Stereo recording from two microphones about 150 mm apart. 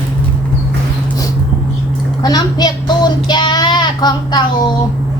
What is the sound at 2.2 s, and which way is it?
Speech, 25° left (ahead or behind).